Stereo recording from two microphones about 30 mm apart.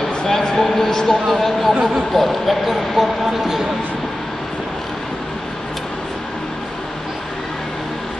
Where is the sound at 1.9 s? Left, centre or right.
Centre.